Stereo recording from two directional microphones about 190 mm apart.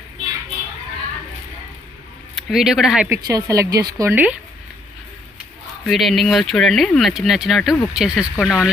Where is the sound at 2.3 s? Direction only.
Centre (ahead or behind).